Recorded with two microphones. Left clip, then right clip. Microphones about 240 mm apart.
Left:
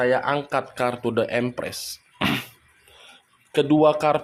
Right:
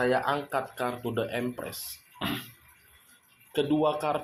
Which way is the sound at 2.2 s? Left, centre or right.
Left.